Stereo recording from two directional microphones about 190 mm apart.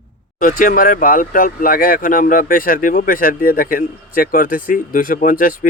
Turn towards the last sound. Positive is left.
turn(degrees=45)  # may be behind; listen again after turning